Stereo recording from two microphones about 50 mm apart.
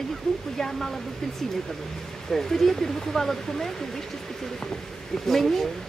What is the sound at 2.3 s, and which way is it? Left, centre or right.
Speech, centre.